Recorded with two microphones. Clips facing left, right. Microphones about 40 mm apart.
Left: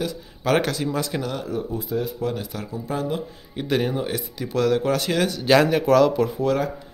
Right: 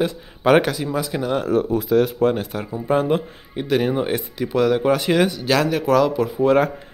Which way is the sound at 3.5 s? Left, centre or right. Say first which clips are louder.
Right 3 dB; centre.